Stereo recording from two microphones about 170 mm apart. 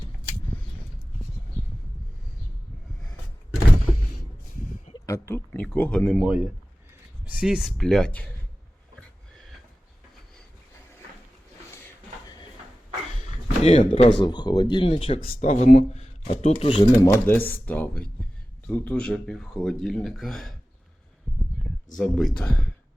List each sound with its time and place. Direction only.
4.9 s speech: 15° left (ahead or behind)
6.1 s speech: 5° right (ahead or behind)
13.6 s speech: 40° left (ahead or behind)
14.2 s speech: 25° left (ahead or behind)
15.2 s speech: 50° left (ahead or behind); by 20.5 s centre (ahead or behind)
21.9 s speech: centre (ahead or behind)